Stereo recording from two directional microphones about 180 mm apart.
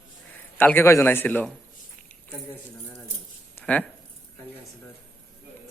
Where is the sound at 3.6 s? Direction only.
10° left (ahead or behind).